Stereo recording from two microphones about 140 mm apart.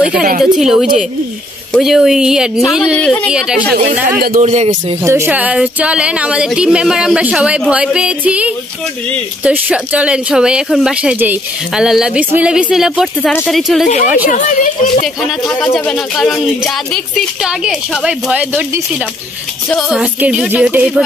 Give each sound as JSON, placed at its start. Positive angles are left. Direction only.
{"t": 0.4, "sound": "speech", "side_deg": 0}
{"t": 2.7, "sound": "speech", "side_deg": 5}
{"t": 3.3, "sound": "speech", "side_deg": -5}
{"t": 4.2, "sound": "speech", "side_deg": -90}
{"t": 4.5, "sound": "speech", "side_deg": -50}
{"t": 5.0, "sound": "speech", "side_deg": -20}
{"t": 14.2, "sound": "speech", "side_deg": 75}
{"t": 15.7, "sound": "speech", "side_deg": 0}
{"t": 20.0, "sound": "speech", "side_deg": -5}